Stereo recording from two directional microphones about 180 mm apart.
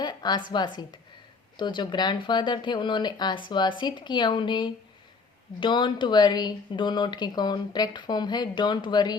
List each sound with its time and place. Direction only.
0.0 s a woman's voice: 25° left (ahead or behind)